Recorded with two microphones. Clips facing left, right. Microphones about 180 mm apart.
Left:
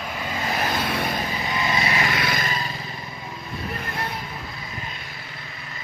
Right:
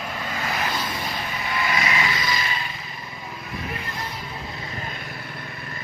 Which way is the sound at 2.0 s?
60° left (ahead or behind).